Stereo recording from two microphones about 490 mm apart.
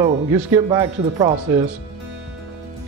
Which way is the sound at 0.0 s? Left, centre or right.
Centre.